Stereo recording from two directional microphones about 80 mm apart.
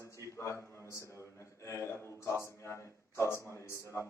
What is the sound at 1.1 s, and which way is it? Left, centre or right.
A man's voice, left.